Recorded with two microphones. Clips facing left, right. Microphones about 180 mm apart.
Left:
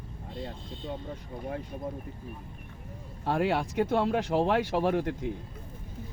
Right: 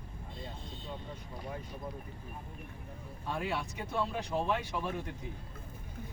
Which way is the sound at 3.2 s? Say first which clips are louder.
Left 9 dB; 85° left.